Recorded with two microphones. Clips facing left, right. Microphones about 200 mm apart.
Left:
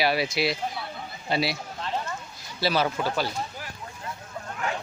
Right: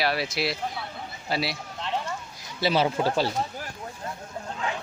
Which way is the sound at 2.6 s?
20° right (ahead or behind).